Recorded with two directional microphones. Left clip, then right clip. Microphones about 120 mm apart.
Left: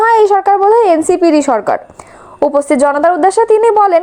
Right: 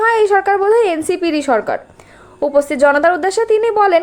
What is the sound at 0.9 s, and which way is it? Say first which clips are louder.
A woman's voice: left 8 dB; 35° left (ahead or behind).